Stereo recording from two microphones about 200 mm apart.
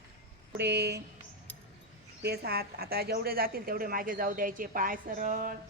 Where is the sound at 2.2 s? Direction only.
55° right (ahead or behind).